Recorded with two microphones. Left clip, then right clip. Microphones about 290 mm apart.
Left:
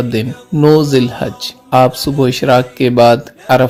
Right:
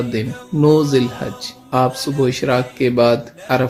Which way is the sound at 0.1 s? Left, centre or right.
Left.